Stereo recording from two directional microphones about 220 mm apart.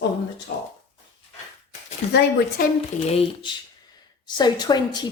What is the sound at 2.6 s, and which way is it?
Speech, 40° left (ahead or behind).